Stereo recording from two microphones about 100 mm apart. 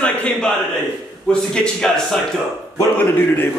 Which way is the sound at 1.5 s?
10° left (ahead or behind).